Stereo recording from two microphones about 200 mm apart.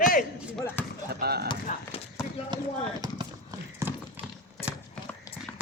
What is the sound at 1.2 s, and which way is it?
Speech, 50° right (ahead or behind).